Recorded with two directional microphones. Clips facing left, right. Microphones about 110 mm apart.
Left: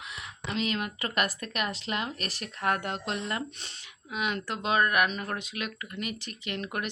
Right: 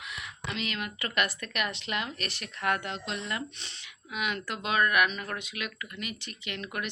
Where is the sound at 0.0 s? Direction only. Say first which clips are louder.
Even; 30° left (ahead or behind).